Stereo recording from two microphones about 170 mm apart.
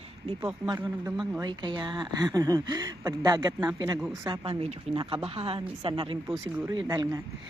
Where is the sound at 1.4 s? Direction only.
25° right (ahead or behind).